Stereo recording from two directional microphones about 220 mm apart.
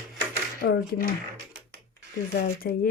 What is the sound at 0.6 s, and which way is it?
Speech, 40° left (ahead or behind).